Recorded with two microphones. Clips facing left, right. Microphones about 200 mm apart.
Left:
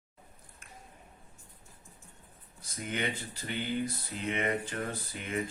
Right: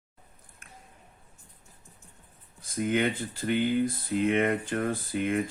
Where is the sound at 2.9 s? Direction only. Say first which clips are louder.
Right 6 dB; 55° right (ahead or behind).